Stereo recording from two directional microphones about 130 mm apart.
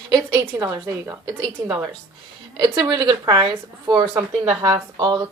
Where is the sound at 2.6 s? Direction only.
35° right (ahead or behind).